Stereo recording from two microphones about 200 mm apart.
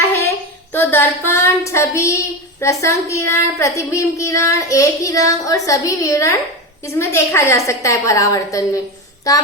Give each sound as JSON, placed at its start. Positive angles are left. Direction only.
{"t": 0.7, "sound": "child singing", "side_deg": 10}
{"t": 2.8, "sound": "speech", "side_deg": 15}